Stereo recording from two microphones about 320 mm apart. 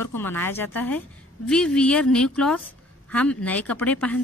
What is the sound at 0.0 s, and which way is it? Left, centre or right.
A woman's voice, centre.